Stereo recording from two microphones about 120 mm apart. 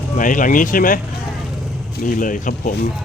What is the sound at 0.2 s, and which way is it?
Speech, 90° left.